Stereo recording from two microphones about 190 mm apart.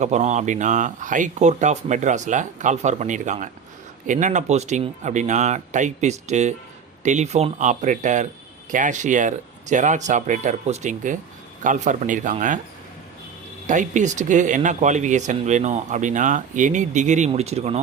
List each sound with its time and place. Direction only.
0.0 s speech: 35° right (ahead or behind)
13.7 s speech: 40° right (ahead or behind)